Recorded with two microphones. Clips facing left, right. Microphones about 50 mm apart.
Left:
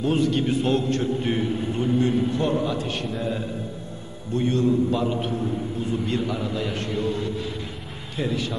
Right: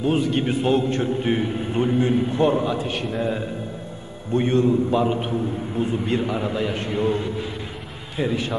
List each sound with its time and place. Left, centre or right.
0.0 s a man's voice: centre
0.4 s a man's voice: right
8.2 s a man's voice: centre